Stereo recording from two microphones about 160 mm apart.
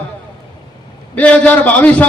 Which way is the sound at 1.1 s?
10° left (ahead or behind).